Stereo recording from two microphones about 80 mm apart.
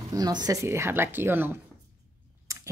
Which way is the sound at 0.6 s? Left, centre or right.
Right.